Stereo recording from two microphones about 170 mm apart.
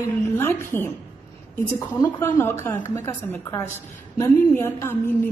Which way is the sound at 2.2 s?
15° left (ahead or behind).